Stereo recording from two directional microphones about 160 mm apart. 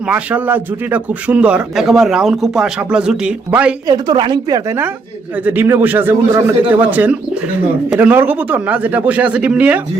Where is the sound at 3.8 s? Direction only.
25° right (ahead or behind).